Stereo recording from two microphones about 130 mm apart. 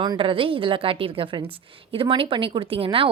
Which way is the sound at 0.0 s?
40° right (ahead or behind).